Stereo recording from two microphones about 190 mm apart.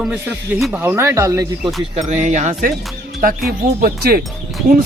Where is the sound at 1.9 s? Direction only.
35° right (ahead or behind).